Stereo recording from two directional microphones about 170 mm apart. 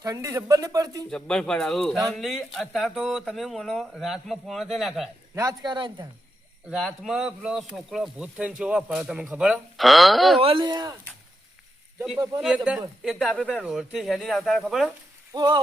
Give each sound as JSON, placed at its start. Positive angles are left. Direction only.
{"t": 0.0, "sound": "speech", "side_deg": -20}
{"t": 1.1, "sound": "speech", "side_deg": 5}
{"t": 5.3, "sound": "speech", "side_deg": -20}
{"t": 6.7, "sound": "speech", "side_deg": 0}
{"t": 10.4, "sound": "speech", "side_deg": -30}
{"t": 12.4, "sound": "speech", "side_deg": -5}
{"t": 15.3, "sound": "speech", "side_deg": -25}